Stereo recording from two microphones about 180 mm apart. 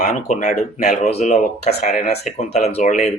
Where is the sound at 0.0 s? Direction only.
45° left (ahead or behind).